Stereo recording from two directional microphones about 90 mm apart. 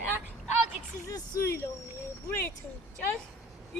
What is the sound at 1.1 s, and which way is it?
A woman's voice, 35° left (ahead or behind).